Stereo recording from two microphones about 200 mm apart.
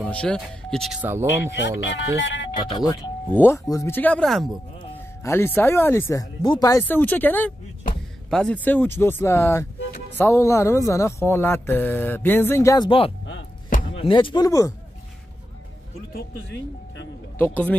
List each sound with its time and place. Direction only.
0.0 s speech: 5° left (ahead or behind); by 1.5 s 10° right (ahead or behind)
2.1 s speech: 65° left (ahead or behind)
2.7 s speech: 20° left (ahead or behind); by 4.6 s centre (ahead or behind)
5.2 s speech: 10° left (ahead or behind)
13.7 s a sound: 40° left (ahead or behind)
14.0 s speech: 25° left (ahead or behind)
16.2 s speech: 60° left (ahead or behind)
17.4 s speech: 10° left (ahead or behind)